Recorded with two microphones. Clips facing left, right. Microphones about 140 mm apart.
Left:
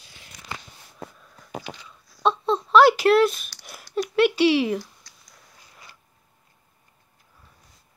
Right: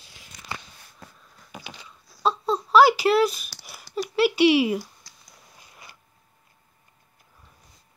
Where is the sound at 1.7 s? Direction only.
40° left (ahead or behind).